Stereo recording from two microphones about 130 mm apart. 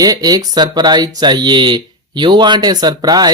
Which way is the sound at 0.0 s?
30° right (ahead or behind).